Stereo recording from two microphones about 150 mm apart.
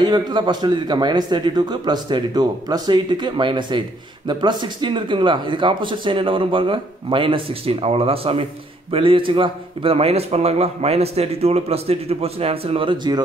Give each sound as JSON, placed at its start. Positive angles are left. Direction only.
{"t": 0.0, "sound": "a man's voice", "side_deg": -30}